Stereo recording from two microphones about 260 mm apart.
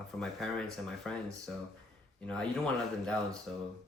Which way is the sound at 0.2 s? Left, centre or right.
Centre.